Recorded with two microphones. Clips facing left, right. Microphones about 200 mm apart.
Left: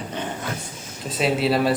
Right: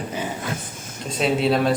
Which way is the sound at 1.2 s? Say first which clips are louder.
Right 1 dB; 5° left (ahead or behind).